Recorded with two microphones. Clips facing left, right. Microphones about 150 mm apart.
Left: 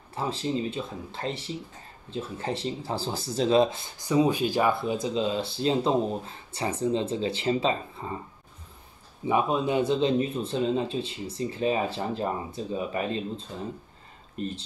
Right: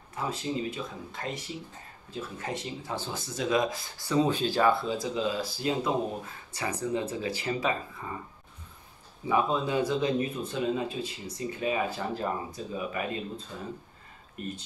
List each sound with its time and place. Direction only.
0.1 s speech: 30° left (ahead or behind)
9.3 s speech: 20° left (ahead or behind)